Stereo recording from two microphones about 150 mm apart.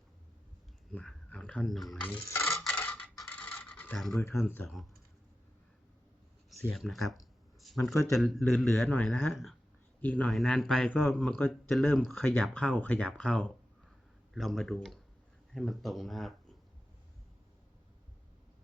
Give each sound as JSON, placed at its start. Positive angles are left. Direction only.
{"t": 0.9, "sound": "speech", "side_deg": 10}
{"t": 2.0, "sound": "speech", "side_deg": 10}
{"t": 2.6, "sound": "coin", "side_deg": 10}
{"t": 4.3, "sound": "speech", "side_deg": 0}
{"t": 6.5, "sound": "a sound", "side_deg": 5}
{"t": 8.1, "sound": "speech", "side_deg": 0}
{"t": 8.8, "sound": "speech", "side_deg": 10}
{"t": 9.3, "sound": "speech", "side_deg": 0}
{"t": 11.3, "sound": "speech", "side_deg": 15}
{"t": 11.9, "sound": "speech", "side_deg": 0}